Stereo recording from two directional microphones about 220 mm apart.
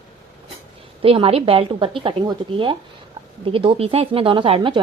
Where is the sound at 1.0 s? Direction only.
25° right (ahead or behind).